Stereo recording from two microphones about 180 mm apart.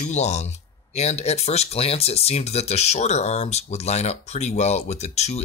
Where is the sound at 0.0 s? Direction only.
40° left (ahead or behind).